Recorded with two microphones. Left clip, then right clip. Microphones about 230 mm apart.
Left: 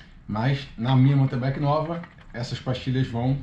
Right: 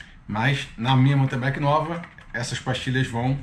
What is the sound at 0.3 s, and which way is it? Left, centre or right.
Speech, centre.